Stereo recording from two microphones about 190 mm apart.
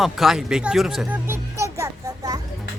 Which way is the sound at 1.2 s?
15° right (ahead or behind).